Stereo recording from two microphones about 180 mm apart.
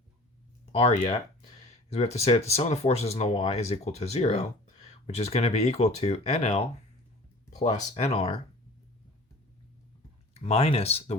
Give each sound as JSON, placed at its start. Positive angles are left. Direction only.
{"t": 0.6, "sound": "speech", "side_deg": 35}
{"t": 10.4, "sound": "speech", "side_deg": 35}